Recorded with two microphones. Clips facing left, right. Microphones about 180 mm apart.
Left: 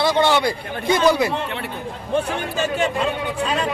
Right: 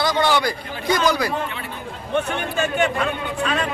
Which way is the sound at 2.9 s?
25° left (ahead or behind).